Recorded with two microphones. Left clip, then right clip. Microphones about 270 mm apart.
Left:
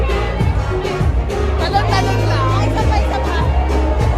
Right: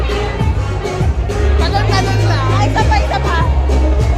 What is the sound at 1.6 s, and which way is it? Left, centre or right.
Music, centre.